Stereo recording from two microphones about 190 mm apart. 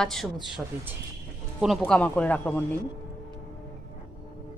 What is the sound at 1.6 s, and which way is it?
A woman's voice, centre (ahead or behind).